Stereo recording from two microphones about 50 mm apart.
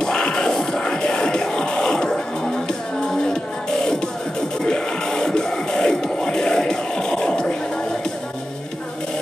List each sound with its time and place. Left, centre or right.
0.0 s music: centre
4.6 s music: centre